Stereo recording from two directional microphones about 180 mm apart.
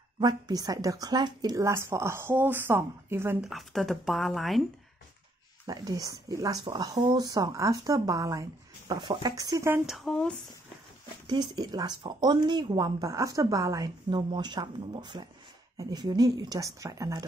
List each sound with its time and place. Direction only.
0.2 s speech: 20° right (ahead or behind)
3.4 s speech: centre (ahead or behind)
5.7 s speech: 20° right (ahead or behind)
9.8 s speech: centre (ahead or behind)
11.2 s speech: 25° right (ahead or behind)